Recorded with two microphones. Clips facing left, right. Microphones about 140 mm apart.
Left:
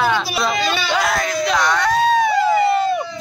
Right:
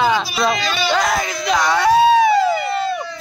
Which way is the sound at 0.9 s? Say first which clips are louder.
Right 2 dB; centre (ahead or behind).